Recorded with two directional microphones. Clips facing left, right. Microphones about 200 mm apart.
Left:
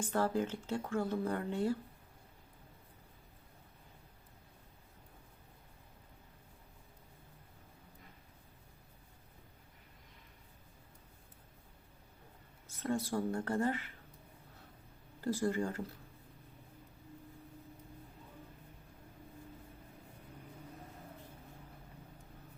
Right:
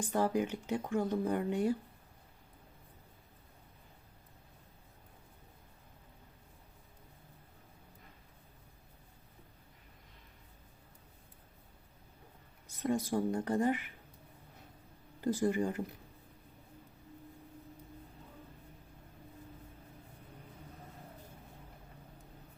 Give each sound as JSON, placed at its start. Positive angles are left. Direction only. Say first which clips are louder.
{"t": 0.0, "sound": "speech", "louder": "right 2 dB", "side_deg": -15}
{"t": 12.6, "sound": "speech", "louder": "right 3 dB", "side_deg": -15}
{"t": 15.2, "sound": "speech", "louder": "right 3 dB", "side_deg": -20}